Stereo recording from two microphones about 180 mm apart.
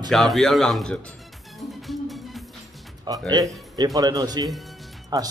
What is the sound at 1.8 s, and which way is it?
Music, centre (ahead or behind).